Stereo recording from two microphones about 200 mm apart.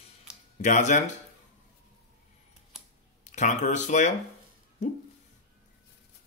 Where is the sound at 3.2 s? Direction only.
35° left (ahead or behind).